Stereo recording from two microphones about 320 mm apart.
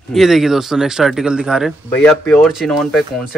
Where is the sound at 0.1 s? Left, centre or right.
Centre.